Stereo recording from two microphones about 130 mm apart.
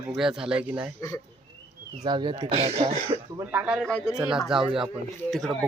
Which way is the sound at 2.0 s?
35° right (ahead or behind).